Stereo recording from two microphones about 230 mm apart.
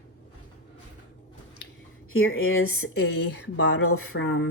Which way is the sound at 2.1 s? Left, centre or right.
Left.